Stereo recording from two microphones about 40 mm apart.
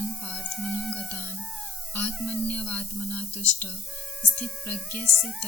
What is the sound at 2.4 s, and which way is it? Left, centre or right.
Speech, left.